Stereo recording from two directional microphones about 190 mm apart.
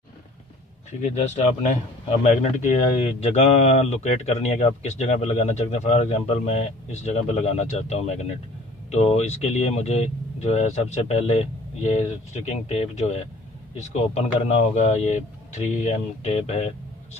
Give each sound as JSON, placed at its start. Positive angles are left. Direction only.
{"t": 1.0, "sound": "speech", "side_deg": 35}